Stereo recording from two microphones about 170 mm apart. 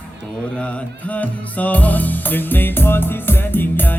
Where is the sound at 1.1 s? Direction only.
10° left (ahead or behind).